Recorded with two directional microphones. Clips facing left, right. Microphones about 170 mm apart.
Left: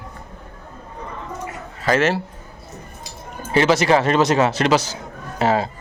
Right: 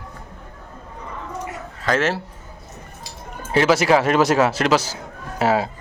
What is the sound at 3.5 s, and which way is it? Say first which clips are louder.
Speech: even; 5° right (ahead or behind).